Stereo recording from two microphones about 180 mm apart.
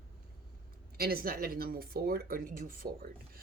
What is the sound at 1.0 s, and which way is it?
Speech, 55° right (ahead or behind).